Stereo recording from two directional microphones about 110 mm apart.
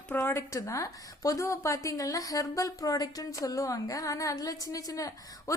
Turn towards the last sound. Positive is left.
turn(degrees=35)  # may be behind; listen again after turning